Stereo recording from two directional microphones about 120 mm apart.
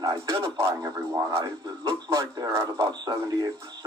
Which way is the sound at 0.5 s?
25° right (ahead or behind).